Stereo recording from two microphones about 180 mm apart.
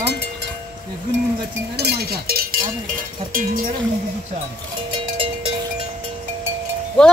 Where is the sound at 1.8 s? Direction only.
60° right (ahead or behind).